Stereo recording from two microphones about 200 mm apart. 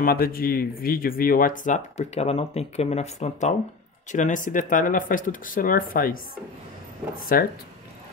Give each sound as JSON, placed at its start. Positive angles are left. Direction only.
{"t": 0.0, "sound": "speech", "side_deg": 45}
{"t": 7.3, "sound": "speech", "side_deg": 45}